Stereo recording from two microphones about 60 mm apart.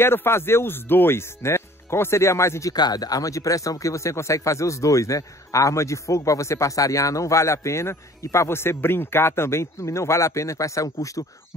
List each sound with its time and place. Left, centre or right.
0.0 s speech: left
2.9 s a man's voice: left